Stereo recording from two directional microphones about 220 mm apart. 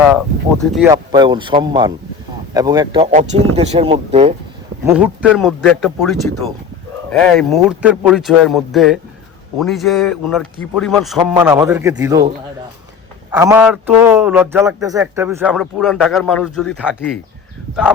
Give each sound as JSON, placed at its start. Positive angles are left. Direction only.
{"t": 0.6, "sound": "a man's voice", "side_deg": 0}
{"t": 0.9, "sound": "speech", "side_deg": -20}
{"t": 4.9, "sound": "a man's voice", "side_deg": -5}
{"t": 13.3, "sound": "a man's voice", "side_deg": -10}